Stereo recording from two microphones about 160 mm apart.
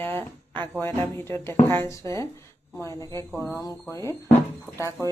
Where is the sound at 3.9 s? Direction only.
15° left (ahead or behind).